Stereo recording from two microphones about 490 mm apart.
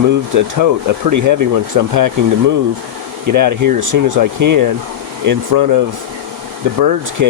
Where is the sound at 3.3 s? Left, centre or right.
Right.